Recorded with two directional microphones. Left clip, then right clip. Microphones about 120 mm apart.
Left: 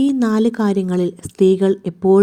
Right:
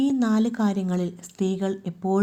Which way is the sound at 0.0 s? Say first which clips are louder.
Left 7 dB; 40° left (ahead or behind).